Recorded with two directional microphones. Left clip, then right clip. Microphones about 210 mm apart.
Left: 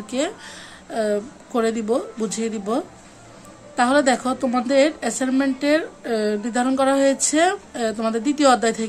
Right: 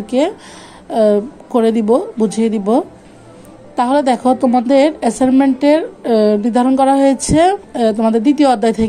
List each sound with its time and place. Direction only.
0.0 s a woman's voice: 15° right (ahead or behind)
3.7 s a woman's voice: 15° right (ahead or behind)